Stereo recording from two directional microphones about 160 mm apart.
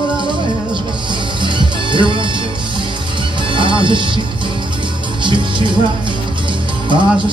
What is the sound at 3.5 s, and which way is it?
Music, 30° right (ahead or behind).